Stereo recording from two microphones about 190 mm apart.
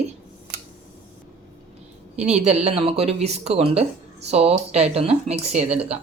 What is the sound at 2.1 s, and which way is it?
Speech, 35° right (ahead or behind).